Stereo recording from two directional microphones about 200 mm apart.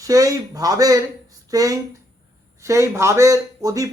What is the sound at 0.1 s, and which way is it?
Speech, 15° right (ahead or behind).